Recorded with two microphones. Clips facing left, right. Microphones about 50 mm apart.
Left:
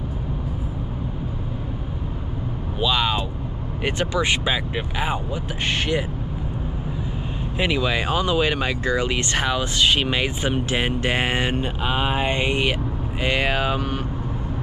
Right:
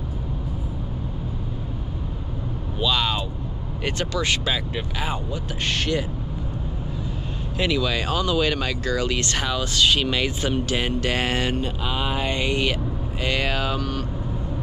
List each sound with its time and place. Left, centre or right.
2.8 s vehicle: centre
3.8 s speech: left
7.5 s speech: left